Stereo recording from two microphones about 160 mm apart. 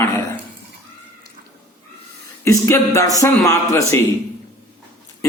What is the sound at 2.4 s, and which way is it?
A man's voice, 20° left (ahead or behind).